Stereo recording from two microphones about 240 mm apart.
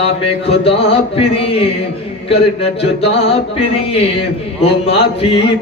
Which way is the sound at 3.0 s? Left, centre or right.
Left.